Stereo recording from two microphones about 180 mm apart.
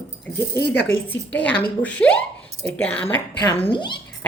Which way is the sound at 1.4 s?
5° left (ahead or behind).